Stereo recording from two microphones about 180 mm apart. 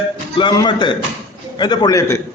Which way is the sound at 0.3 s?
25° left (ahead or behind).